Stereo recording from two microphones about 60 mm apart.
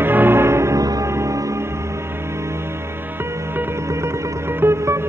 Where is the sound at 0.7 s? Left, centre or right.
Right.